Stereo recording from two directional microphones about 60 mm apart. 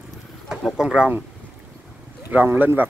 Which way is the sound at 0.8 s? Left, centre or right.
Centre.